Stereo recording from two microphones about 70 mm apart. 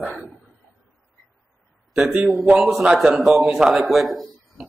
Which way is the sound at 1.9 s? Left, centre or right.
Centre.